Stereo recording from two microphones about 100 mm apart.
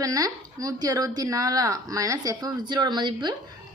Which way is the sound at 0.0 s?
35° right (ahead or behind).